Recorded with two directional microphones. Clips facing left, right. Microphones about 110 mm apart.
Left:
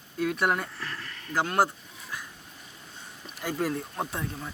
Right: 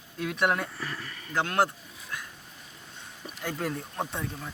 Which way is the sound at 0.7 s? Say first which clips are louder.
Right 1 dB; 10° right (ahead or behind).